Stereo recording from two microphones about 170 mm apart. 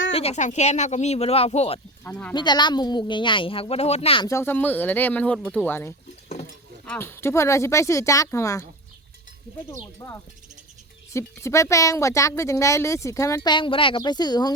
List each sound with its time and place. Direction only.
0.1 s speech: 35° left (ahead or behind)
2.0 s speech: 5° left (ahead or behind)
2.3 s speech: 25° left (ahead or behind)
4.3 s speech: 15° left (ahead or behind)
10.0 s speech: 15° left (ahead or behind)